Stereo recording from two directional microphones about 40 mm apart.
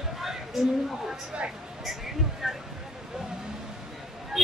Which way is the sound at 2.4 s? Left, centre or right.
Centre.